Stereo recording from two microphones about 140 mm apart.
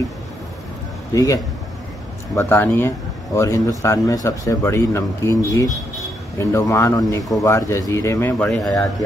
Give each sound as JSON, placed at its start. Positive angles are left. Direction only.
{"t": 1.1, "sound": "speech", "side_deg": 25}
{"t": 2.3, "sound": "speech", "side_deg": 15}